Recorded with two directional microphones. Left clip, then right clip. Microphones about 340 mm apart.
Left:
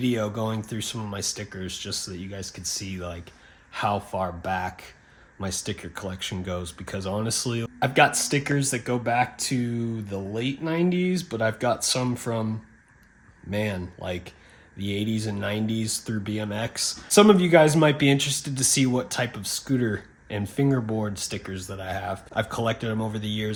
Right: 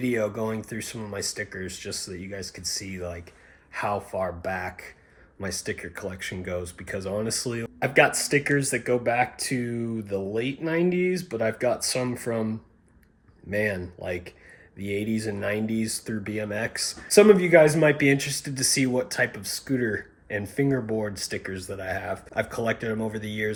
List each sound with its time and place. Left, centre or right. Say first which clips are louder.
0.0 s speech: right 1 dB; centre
4.2 s speech: left 1 dB; centre
13.5 s speech: right 3 dB; centre